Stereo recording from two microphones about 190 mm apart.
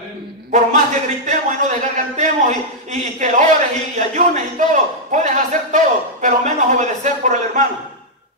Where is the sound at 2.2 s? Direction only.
40° right (ahead or behind).